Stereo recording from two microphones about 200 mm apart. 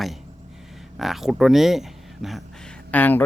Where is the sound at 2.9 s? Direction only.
10° left (ahead or behind).